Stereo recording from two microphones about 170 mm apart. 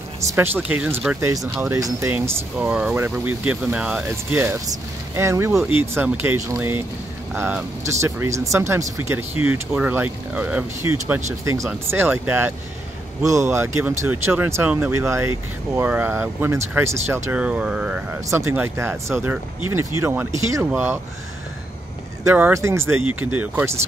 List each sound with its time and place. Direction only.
0.2 s speech: 15° right (ahead or behind)
1.2 s speech: 20° right (ahead or behind)
22.2 s speech: 15° right (ahead or behind)